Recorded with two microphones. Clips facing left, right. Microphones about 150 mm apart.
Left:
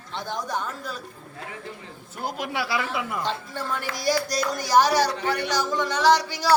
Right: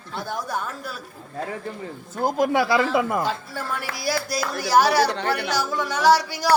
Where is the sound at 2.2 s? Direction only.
45° right (ahead or behind).